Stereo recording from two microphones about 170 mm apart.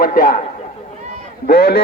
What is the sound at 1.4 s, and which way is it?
Speech, 70° left (ahead or behind).